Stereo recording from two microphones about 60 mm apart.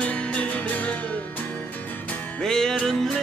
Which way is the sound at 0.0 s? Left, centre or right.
Centre.